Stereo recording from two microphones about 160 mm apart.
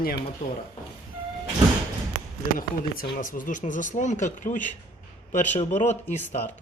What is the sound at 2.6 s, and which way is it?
Speech, 60° left (ahead or behind).